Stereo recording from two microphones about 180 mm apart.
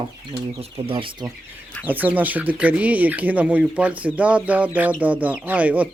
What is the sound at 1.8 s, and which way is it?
Speech, 10° right (ahead or behind).